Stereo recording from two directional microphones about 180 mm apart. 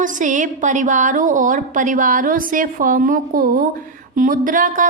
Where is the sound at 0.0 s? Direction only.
45° right (ahead or behind).